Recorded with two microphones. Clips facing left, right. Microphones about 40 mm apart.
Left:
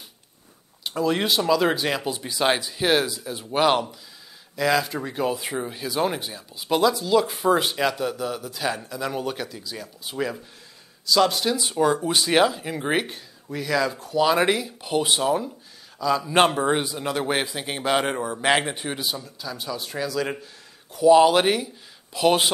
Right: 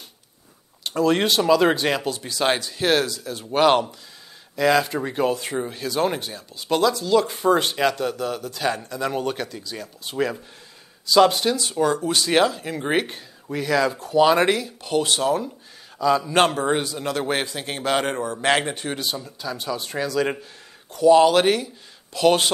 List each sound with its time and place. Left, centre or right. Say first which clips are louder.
0.9 s speech: right 3 dB; centre
1.4 s speech: right 4 dB; centre
2.0 s a man's voice: even; centre
3.4 s speech: right 3 dB; centre
5.3 s a man's voice: right 2 dB; centre
9.1 s speech: right 3 dB; centre
11.1 s speech: right 4 dB; centre
11.5 s a man's voice: even; centre
13.1 s speech: right 3 dB; centre
14.4 s a man's voice: right 1 dB; centre
16.0 s speech: right 3 dB; centre
16.3 s a man's voice: even; centre
20.9 s a man's voice: right 1 dB; centre